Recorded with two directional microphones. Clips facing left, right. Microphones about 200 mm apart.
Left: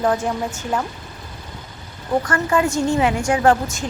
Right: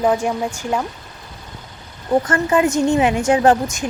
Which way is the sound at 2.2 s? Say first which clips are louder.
Right 3 dB; 20° right (ahead or behind).